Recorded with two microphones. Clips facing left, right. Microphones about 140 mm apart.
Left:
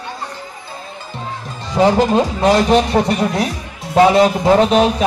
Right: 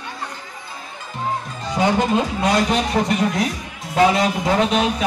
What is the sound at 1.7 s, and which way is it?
Speech, 35° left (ahead or behind).